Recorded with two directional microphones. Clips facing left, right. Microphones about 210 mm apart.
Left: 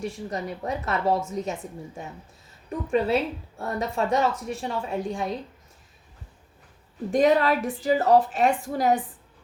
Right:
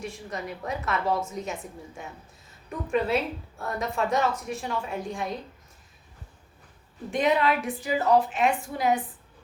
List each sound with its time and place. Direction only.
0.0 s a woman's voice: 35° left (ahead or behind)
7.1 s a woman's voice: 40° left (ahead or behind)